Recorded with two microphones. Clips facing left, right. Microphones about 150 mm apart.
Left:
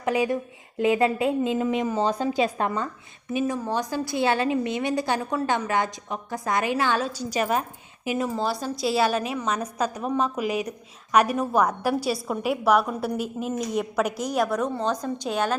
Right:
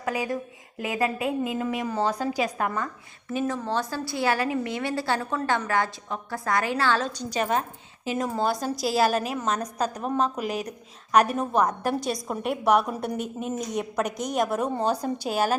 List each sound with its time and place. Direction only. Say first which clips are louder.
0.0 s a woman's voice: left 4 dB; 20° left (ahead or behind); by 15.5 s 5° right (ahead or behind)